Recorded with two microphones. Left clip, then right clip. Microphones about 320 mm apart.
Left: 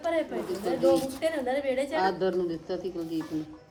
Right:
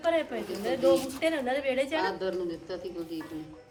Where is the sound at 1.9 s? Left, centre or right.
Left.